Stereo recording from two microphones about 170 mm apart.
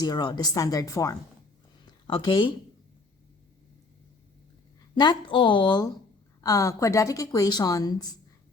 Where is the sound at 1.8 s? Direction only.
30° left (ahead or behind).